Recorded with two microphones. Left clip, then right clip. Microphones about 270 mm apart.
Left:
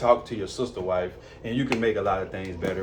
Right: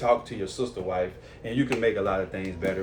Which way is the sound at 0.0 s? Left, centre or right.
Centre.